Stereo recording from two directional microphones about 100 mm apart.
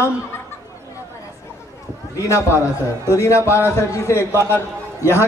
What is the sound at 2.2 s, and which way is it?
A man's voice, 30° left (ahead or behind).